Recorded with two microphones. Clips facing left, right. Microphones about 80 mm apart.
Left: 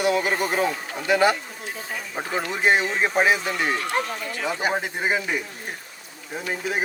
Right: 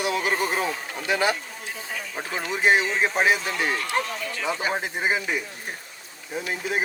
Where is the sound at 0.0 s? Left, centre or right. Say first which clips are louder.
Left 3 dB; left.